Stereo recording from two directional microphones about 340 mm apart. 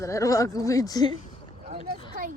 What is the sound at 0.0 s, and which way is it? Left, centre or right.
Speech, centre.